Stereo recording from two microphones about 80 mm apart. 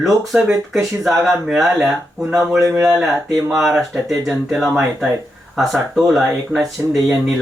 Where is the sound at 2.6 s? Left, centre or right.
Right.